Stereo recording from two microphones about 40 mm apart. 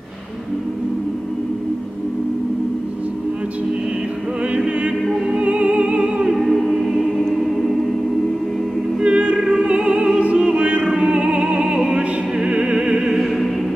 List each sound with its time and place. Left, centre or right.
5.3 s music: right
6.3 s choir: centre
9.0 s opera: right
10.9 s music: right